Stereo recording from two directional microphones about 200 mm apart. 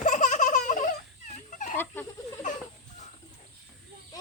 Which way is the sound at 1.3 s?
35° left (ahead or behind).